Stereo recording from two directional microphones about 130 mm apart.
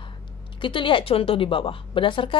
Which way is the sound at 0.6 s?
40° left (ahead or behind).